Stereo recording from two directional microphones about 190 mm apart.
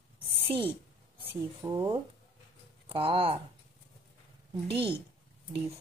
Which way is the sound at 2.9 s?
30° right (ahead or behind).